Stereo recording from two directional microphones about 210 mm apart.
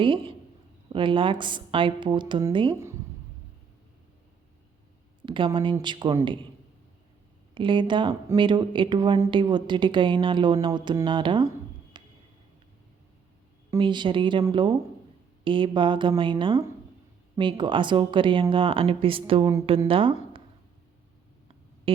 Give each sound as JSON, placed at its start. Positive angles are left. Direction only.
{"t": 0.0, "sound": "speech", "side_deg": -25}
{"t": 5.2, "sound": "speech", "side_deg": -25}
{"t": 7.5, "sound": "speech", "side_deg": -25}
{"t": 11.9, "sound": "a sound", "side_deg": -20}
{"t": 13.7, "sound": "speech", "side_deg": -25}
{"t": 21.9, "sound": "a sound", "side_deg": -25}